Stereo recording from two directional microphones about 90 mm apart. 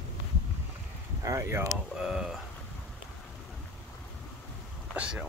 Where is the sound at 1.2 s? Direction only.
35° right (ahead or behind).